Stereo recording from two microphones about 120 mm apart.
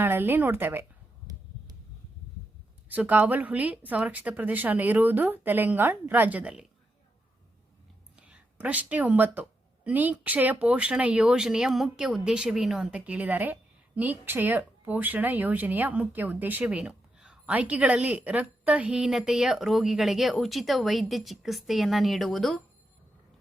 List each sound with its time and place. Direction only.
0.0 s a woman's voice: 15° right (ahead or behind)
2.9 s a woman's voice: 15° right (ahead or behind)
8.1 s a woman's voice: 10° right (ahead or behind)